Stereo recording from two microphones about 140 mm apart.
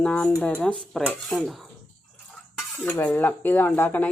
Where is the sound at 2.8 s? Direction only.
10° left (ahead or behind).